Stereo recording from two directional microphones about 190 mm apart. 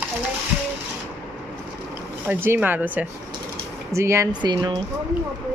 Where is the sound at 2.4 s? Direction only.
10° right (ahead or behind).